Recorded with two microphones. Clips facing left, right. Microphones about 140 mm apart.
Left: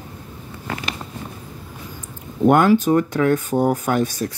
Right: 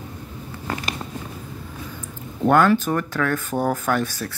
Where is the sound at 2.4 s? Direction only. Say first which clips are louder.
Left 3 dB; 15° left (ahead or behind).